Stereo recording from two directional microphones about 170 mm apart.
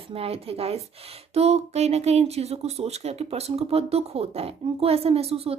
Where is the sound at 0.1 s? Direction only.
35° right (ahead or behind).